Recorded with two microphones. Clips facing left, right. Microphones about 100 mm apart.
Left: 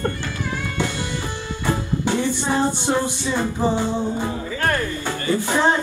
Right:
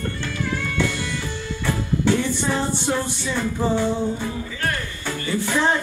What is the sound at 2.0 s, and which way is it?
Music, 20° left (ahead or behind).